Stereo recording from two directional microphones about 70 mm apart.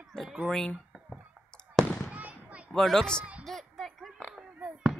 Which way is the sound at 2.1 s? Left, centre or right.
Centre.